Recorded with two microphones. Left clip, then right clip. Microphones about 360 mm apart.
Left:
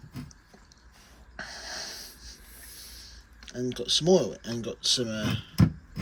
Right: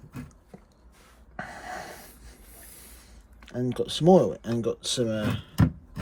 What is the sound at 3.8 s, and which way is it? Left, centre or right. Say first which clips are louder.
Speech: right 3 dB; centre.